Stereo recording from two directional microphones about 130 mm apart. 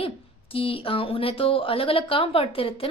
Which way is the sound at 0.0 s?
45° left (ahead or behind).